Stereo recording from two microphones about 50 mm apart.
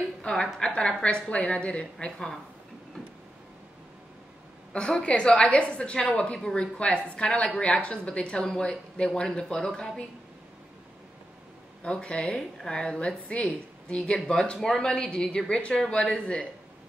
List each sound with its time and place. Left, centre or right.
0.2 s a woman's voice: centre
4.7 s a woman's voice: left
11.8 s a woman's voice: left